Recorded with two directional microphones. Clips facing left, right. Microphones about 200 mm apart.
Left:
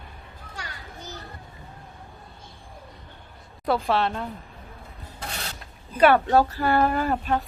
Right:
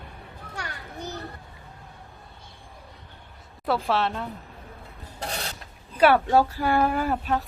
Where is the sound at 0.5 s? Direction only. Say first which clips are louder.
Right 3 dB; 60° right (ahead or behind).